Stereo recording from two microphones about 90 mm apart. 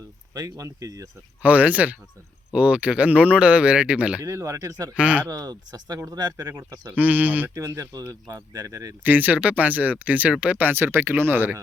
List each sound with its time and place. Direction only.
0.3 s speech: 40° right (ahead or behind)
1.4 s speech: 15° right (ahead or behind)
4.2 s speech: 35° right (ahead or behind)
4.9 s speech: 15° right (ahead or behind)
5.3 s speech: 40° right (ahead or behind)
6.8 s speech: 15° right (ahead or behind)
7.5 s speech: 35° right (ahead or behind)
9.0 s speech: 20° right (ahead or behind)